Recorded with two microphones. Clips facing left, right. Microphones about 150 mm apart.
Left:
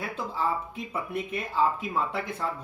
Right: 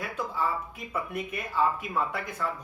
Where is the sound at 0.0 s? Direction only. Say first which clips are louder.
Left 1 dB; 30° left (ahead or behind).